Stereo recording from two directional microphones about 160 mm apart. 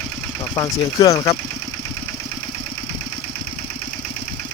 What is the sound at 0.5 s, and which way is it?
Speech, 25° left (ahead or behind).